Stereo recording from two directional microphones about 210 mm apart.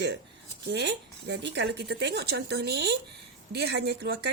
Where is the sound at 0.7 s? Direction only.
55° right (ahead or behind).